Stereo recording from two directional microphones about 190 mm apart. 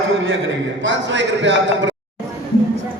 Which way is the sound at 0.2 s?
80° right.